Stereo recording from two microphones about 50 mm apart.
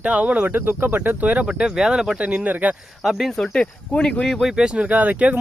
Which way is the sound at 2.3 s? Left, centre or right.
Right.